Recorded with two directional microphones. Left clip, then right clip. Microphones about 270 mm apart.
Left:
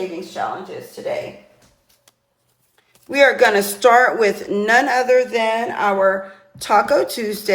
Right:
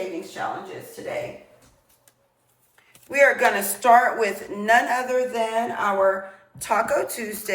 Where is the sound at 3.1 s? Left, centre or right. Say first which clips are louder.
Left 5 dB; centre.